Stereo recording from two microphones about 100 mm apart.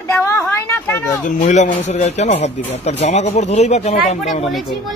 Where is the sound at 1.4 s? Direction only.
90° left.